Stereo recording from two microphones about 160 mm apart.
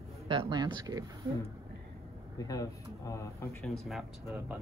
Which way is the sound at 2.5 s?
20° left (ahead or behind).